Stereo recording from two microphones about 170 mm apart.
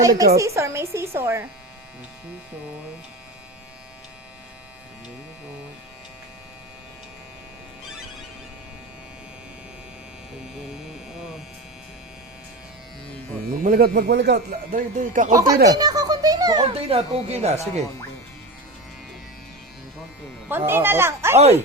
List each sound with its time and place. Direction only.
0.0 s a child's voice: 20° right (ahead or behind)
13.5 s speech: 55° right (ahead or behind)
15.3 s a child's voice: 20° right (ahead or behind); by 17.8 s 40° right (ahead or behind)
20.5 s a woman's voice: 10° right (ahead or behind)